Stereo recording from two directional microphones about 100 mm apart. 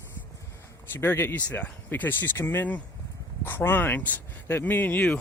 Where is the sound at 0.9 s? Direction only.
25° left (ahead or behind).